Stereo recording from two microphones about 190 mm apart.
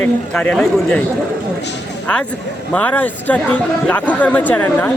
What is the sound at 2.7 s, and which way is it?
Speech, 10° left (ahead or behind).